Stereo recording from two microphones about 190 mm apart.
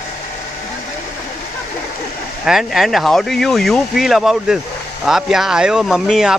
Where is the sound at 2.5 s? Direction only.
Centre (ahead or behind).